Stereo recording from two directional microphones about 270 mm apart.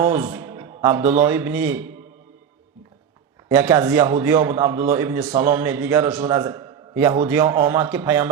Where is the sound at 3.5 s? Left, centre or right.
Centre.